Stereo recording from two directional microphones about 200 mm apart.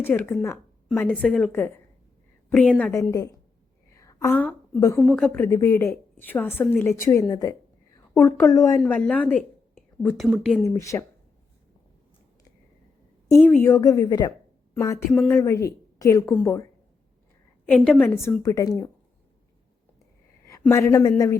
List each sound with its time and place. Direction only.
0.0 s a woman's voice: 10° left (ahead or behind)
3.9 s a sound: 15° left (ahead or behind)
4.7 s a woman's voice: 15° left (ahead or behind)
5.0 s a woman's voice: 5° left (ahead or behind)
8.8 s a woman's voice: 5° left (ahead or behind)
10.2 s speech: 10° right (ahead or behind)
10.5 s a woman's voice: 5° left (ahead or behind)
10.8 s a woman's voice: 15° left (ahead or behind)
13.2 s a woman's voice: 15° left (ahead or behind)
17.7 s a woman's voice: 5° left (ahead or behind)
20.4 s a woman's voice: 15° left (ahead or behind)